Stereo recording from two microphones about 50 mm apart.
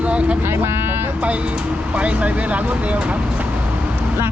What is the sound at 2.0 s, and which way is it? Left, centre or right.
Speech, right.